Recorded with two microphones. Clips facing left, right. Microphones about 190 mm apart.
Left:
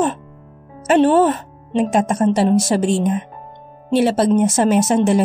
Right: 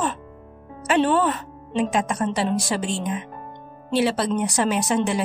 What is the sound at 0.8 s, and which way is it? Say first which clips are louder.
A woman's voice: left 7 dB; 45° left (ahead or behind).